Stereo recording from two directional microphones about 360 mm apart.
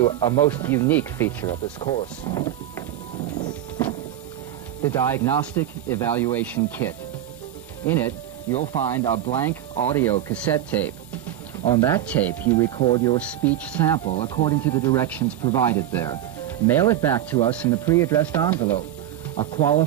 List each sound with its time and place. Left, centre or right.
0.0 s speech: centre
4.8 s speech: centre
9.1 s speech: centre
10.1 s speech: centre
14.0 s speech: centre